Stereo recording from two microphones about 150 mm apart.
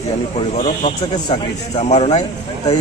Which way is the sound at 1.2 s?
40° left (ahead or behind).